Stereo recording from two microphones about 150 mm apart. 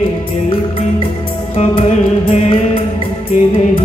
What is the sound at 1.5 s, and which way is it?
Music, 45° left (ahead or behind).